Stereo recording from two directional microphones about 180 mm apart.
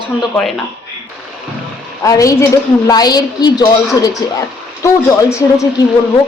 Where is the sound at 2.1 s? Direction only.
20° left (ahead or behind).